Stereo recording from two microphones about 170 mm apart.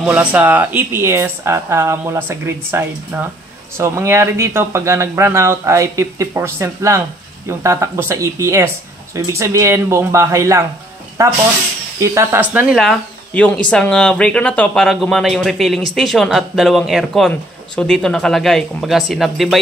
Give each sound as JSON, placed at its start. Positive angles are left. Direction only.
{"t": 0.0, "sound": "speech", "side_deg": -10}
{"t": 12.7, "sound": "speech", "side_deg": 5}